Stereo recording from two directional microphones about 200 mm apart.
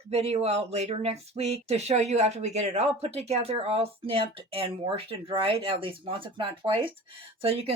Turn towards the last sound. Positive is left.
turn(degrees=-30)  # may be behind; listen again after turning